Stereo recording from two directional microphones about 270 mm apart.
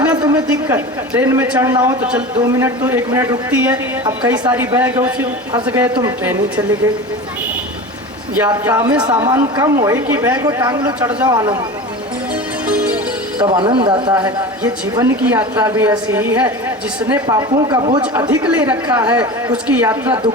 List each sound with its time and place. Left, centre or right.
0.1 s a woman's voice: centre
8.4 s a woman's voice: centre
12.6 s music: centre
13.4 s a woman's voice: centre